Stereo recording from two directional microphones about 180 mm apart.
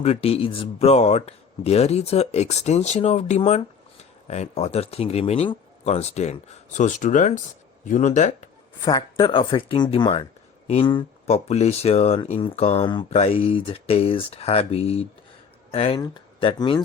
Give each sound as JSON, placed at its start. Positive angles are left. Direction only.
{"t": 0.0, "sound": "speech", "side_deg": 35}
{"t": 8.8, "sound": "speech", "side_deg": 25}